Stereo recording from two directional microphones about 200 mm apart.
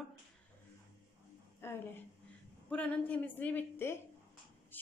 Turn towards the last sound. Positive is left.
turn(degrees=10)  # may be behind; listen again after turning